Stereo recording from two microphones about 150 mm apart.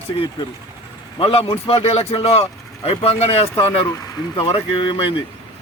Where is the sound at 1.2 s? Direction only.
40° left (ahead or behind).